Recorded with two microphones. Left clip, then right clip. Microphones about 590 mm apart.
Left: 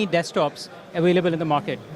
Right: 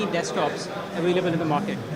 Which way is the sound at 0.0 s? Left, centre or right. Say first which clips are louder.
Left 3 dB; left.